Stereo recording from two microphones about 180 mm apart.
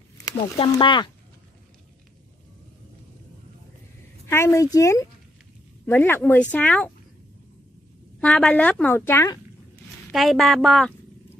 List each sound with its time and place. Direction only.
0.2 s speech: 25° left (ahead or behind)
4.3 s a woman's voice: 15° left (ahead or behind)
8.2 s a woman's voice: 5° left (ahead or behind)
10.1 s a woman's voice: centre (ahead or behind)